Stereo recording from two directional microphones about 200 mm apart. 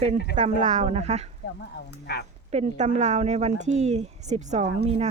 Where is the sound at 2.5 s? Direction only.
35° right (ahead or behind).